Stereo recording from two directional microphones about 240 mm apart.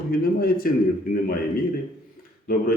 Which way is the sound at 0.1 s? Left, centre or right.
Left.